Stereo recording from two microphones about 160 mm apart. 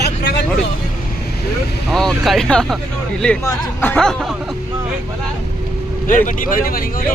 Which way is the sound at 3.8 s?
5° left (ahead or behind).